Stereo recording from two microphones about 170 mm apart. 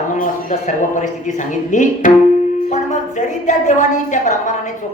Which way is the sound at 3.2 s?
45° left (ahead or behind).